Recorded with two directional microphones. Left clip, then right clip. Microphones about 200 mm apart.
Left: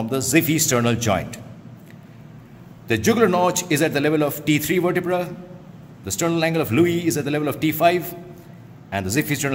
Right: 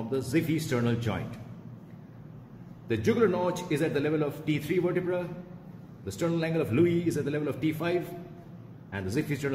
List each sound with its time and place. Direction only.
0.1 s a man's voice: 50° left (ahead or behind)
2.9 s a man's voice: 45° left (ahead or behind)